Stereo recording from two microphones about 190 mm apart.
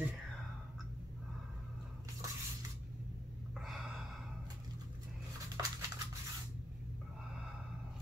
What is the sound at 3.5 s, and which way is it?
Gasp, centre (ahead or behind).